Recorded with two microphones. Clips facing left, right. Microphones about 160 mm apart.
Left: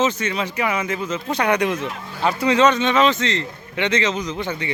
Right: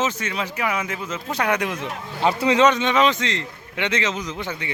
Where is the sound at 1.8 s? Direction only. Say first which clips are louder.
Even; 20° right (ahead or behind).